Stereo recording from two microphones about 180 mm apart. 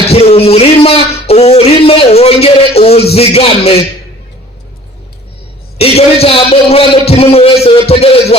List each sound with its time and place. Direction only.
0.1 s a sound: 35° left (ahead or behind)
3.2 s a man's voice: 35° left (ahead or behind)
5.7 s a man's voice: 35° left (ahead or behind)